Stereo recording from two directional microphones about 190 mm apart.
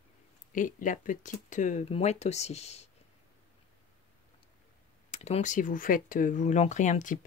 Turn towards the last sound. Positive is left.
turn(degrees=45)  # may be behind; listen again after turning